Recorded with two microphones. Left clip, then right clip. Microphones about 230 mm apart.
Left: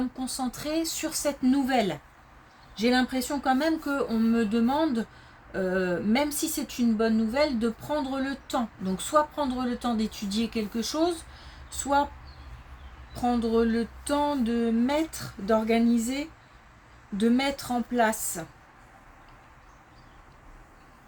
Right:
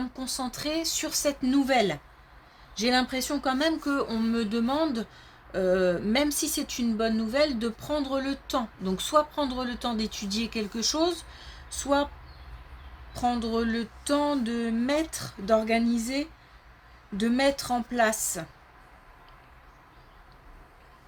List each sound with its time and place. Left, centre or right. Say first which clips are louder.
0.2 s speech: even; right
13.1 s speech: left 2 dB; right